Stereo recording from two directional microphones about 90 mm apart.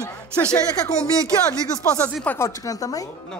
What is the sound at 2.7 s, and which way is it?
Speech, 40° left (ahead or behind).